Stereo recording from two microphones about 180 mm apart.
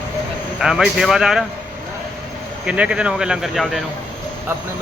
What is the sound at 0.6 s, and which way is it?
Speech, 5° right (ahead or behind).